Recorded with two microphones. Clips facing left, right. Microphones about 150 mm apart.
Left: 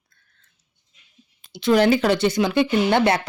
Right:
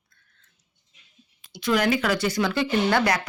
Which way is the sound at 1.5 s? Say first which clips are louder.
Left 6 dB; 25° left (ahead or behind).